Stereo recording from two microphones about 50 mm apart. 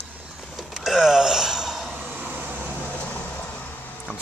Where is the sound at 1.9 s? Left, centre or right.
Right.